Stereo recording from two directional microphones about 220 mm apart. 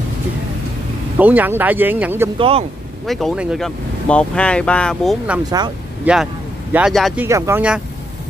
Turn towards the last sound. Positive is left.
turn(degrees=-10)  # may be behind; listen again after turning